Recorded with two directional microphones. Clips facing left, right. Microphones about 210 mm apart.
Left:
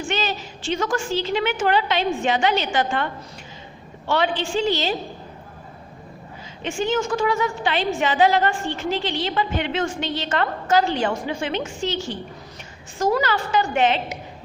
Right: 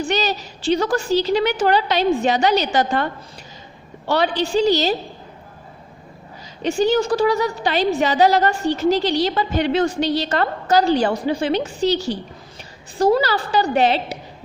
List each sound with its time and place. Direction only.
0.0 s a woman's voice: 40° right (ahead or behind)
6.6 s a woman's voice: 35° right (ahead or behind)